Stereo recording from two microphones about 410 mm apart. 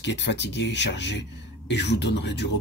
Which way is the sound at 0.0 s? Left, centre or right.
Left.